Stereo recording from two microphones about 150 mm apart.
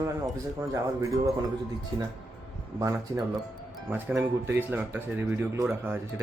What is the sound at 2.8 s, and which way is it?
Speech, 20° right (ahead or behind).